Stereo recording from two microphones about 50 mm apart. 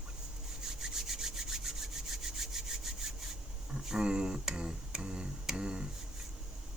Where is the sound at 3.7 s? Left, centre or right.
Centre.